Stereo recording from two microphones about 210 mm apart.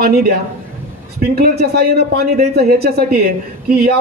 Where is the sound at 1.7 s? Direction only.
50° right (ahead or behind).